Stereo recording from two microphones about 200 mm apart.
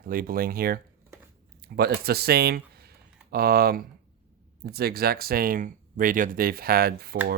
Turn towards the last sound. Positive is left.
turn(degrees=-50)  # may be behind; listen again after turning